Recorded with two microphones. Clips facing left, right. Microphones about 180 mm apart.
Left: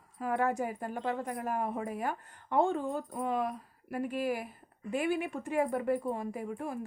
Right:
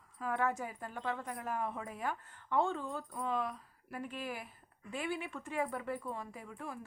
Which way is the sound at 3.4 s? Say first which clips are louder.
Left 6 dB; 45° left (ahead or behind).